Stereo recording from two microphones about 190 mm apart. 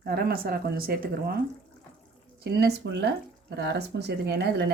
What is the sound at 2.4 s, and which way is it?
Speech, 60° right (ahead or behind).